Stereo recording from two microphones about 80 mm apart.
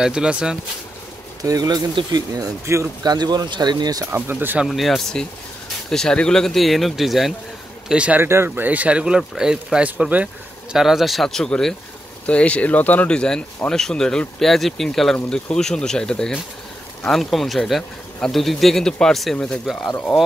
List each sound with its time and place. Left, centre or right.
0.0 s speech: centre
1.4 s speech: right
2.6 s speech: right
3.0 s speech: right
4.0 s speech: right
4.6 s speech: centre
7.9 s speech: centre
8.2 s speech: right
8.5 s speech: centre
9.8 s speech: centre
10.8 s speech: centre